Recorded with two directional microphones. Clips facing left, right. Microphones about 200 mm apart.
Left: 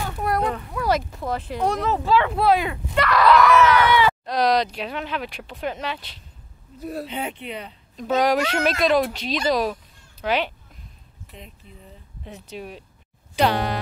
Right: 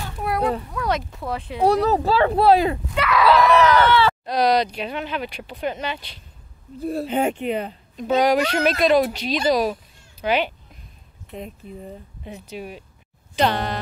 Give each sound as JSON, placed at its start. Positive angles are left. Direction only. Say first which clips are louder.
{"t": 0.2, "sound": "a child's voice", "louder": "right 2 dB", "side_deg": -5}
{"t": 1.6, "sound": "speech", "louder": "right 7 dB", "side_deg": -35}
{"t": 2.9, "sound": "a sound", "louder": "left 2 dB", "side_deg": 0}
{"t": 3.3, "sound": "a sound", "louder": "right 1 dB", "side_deg": -35}
{"t": 4.3, "sound": "speech", "louder": "right 1 dB", "side_deg": 0}
{"t": 6.8, "sound": "speech", "louder": "right 5 dB", "side_deg": -30}
{"t": 7.1, "sound": "speech", "louder": "right 9 dB", "side_deg": -45}
{"t": 8.2, "sound": "speech", "louder": "right 2 dB", "side_deg": 0}
{"t": 11.3, "sound": "speech", "louder": "right 11 dB", "side_deg": -50}
{"t": 12.3, "sound": "speech", "louder": "right 2 dB", "side_deg": 0}
{"t": 13.4, "sound": "a sound", "louder": "even", "side_deg": 10}